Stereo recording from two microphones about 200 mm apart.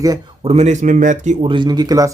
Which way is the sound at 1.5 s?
20° right (ahead or behind).